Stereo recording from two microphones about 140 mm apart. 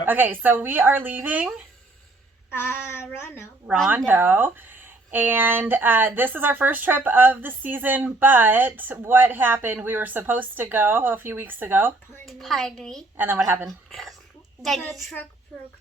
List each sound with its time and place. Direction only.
0.0 s speech: 15° right (ahead or behind)
2.5 s speech: 15° left (ahead or behind)
3.8 s speech: 15° right (ahead or behind)
12.2 s a woman's voice: centre (ahead or behind)
13.1 s speech: 15° right (ahead or behind)
13.7 s a woman's voice: centre (ahead or behind)